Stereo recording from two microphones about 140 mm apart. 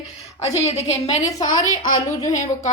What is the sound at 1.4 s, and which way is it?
Speech, 65° left (ahead or behind).